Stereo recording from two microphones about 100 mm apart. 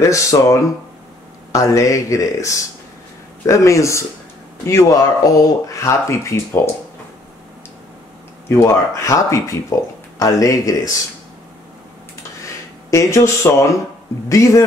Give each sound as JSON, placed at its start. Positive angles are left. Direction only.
{"t": 0.0, "sound": "speech", "side_deg": 35}
{"t": 8.5, "sound": "speech", "side_deg": 30}
{"t": 12.9, "sound": "speech", "side_deg": 30}